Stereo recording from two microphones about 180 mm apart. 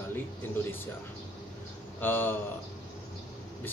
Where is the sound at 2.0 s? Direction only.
10° left (ahead or behind).